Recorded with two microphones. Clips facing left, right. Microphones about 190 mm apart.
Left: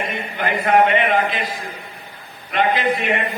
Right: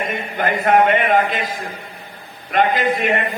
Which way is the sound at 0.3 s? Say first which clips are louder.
Right 1 dB; 45° right (ahead or behind).